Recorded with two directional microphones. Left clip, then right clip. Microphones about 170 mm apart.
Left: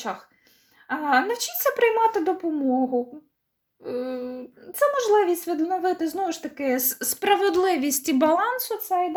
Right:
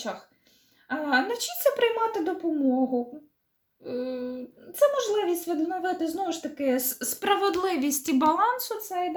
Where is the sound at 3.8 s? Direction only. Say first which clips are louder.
Left 2 dB; 25° left (ahead or behind).